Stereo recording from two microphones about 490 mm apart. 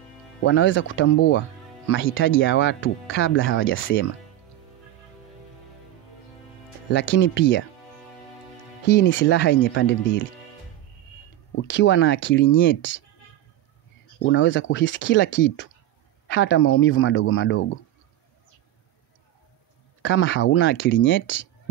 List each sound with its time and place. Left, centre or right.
0.4 s speech: left
6.9 s speech: left
8.8 s speech: left
11.6 s speech: left
14.2 s speech: left
20.0 s speech: left